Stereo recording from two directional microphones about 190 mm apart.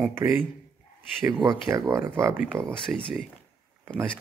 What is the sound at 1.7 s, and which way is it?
Speech, 10° right (ahead or behind).